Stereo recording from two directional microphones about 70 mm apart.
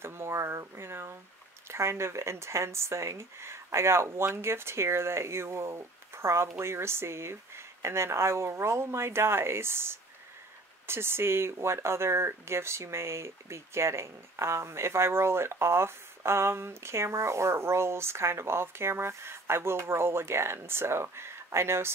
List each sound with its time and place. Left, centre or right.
0.0 s speech: right